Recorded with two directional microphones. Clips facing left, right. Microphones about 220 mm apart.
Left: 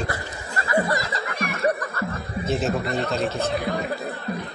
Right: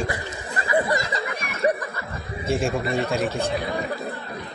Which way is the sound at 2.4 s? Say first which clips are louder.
Right 1 dB; 10° right (ahead or behind).